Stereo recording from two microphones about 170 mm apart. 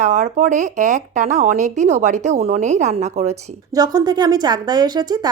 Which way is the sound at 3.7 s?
25° right (ahead or behind).